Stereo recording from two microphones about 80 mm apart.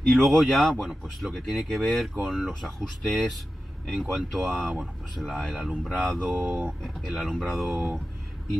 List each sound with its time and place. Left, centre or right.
0.0 s speech: centre
5.7 s speech: centre
6.0 s speech: centre
6.3 s speech: right
6.8 s speech: centre
7.7 s speech: right